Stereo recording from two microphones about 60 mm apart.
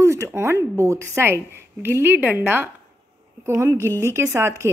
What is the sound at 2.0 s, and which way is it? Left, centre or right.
A woman's voice, right.